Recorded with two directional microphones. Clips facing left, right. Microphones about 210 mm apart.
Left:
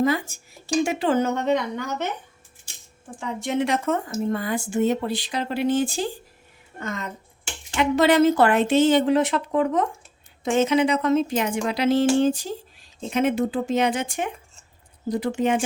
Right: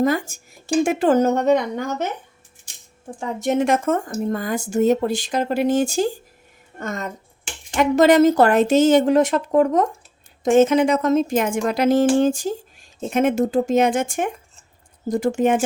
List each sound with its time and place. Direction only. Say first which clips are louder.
0.0 s speech: right 2 dB; 45° right (ahead or behind)
3.2 s speech: right 4 dB; 45° right (ahead or behind)